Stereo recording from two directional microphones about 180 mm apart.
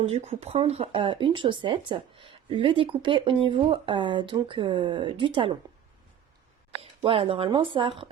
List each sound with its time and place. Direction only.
0.0 s speech: 40° right (ahead or behind)
6.7 s speech: 30° right (ahead or behind)